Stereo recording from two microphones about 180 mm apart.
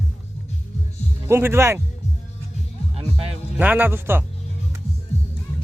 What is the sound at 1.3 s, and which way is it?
Speech, 15° right (ahead or behind).